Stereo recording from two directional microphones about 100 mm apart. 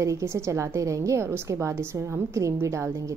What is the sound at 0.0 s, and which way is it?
A woman's voice, 30° right (ahead or behind).